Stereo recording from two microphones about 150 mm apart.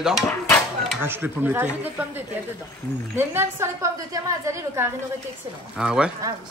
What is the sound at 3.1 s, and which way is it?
A woman's voice, 15° right (ahead or behind).